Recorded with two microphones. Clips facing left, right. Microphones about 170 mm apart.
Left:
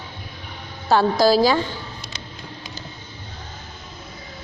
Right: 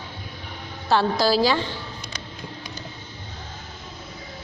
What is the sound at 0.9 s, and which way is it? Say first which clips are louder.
Speech: left 4 dB; 45° left (ahead or behind).